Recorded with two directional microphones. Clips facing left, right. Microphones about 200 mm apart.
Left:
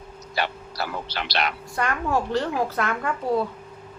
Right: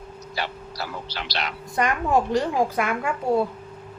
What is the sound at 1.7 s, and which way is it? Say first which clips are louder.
A woman's voice: right 4 dB; 15° right (ahead or behind).